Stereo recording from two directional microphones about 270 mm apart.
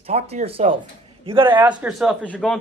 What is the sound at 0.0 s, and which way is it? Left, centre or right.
Speech, right.